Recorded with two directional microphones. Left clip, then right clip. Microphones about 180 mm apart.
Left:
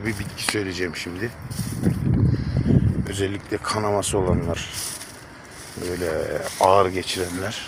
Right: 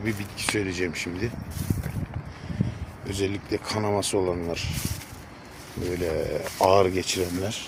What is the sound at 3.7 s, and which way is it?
Speech, 15° right (ahead or behind).